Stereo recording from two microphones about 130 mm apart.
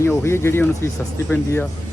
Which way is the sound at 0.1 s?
20° left (ahead or behind).